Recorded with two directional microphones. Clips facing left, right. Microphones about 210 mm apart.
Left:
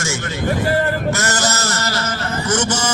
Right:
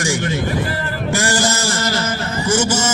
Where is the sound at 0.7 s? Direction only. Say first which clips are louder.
Left 6 dB; 50° left (ahead or behind).